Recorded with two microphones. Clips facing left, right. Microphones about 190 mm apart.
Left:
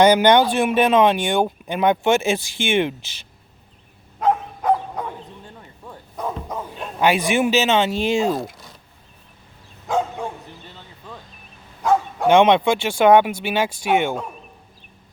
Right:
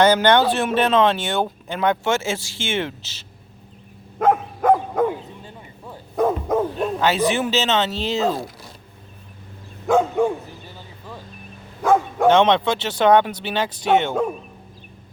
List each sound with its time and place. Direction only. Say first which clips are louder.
0.0 s speech: left 2 dB; 15° left (ahead or behind)
4.2 s dog: right 2 dB; 50° right (ahead or behind)
6.1 s bow-wow: right 9 dB; 50° right (ahead or behind)
7.0 s speech: left 3 dB; 15° left (ahead or behind)
9.8 s dog: right 6 dB; 55° right (ahead or behind)
11.8 s bow-wow: right 2 dB; 55° right (ahead or behind)
12.3 s speech: left 3 dB; 10° left (ahead or behind)